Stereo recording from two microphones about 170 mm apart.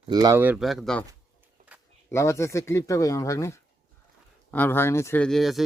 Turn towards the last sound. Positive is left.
turn(degrees=0)  # may be behind; listen again after turning